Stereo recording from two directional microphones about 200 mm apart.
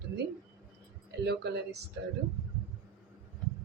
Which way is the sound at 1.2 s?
55° right (ahead or behind).